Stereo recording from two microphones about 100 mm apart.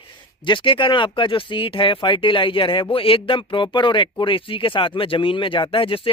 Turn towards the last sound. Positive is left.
turn(degrees=65)  # may be behind; listen again after turning